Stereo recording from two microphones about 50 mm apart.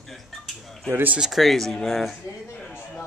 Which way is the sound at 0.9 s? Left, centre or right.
Right.